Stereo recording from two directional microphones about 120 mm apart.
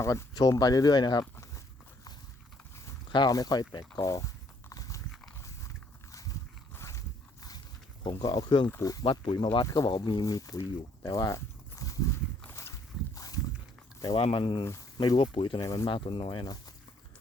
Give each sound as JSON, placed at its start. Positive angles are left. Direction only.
{"t": 0.0, "sound": "speech", "side_deg": 25}
{"t": 3.1, "sound": "speech", "side_deg": 35}
{"t": 4.7, "sound": "a sound", "side_deg": 30}
{"t": 6.1, "sound": "dog", "side_deg": 30}
{"t": 6.7, "sound": "a sound", "side_deg": 25}
{"t": 8.0, "sound": "speech", "side_deg": 40}
{"t": 9.0, "sound": "speech", "side_deg": 45}
{"t": 11.0, "sound": "walk", "side_deg": 30}
{"t": 12.5, "sound": "boat", "side_deg": 25}
{"t": 14.2, "sound": "speech", "side_deg": 50}
{"t": 14.6, "sound": "speech", "side_deg": 25}
{"t": 14.9, "sound": "speech", "side_deg": 40}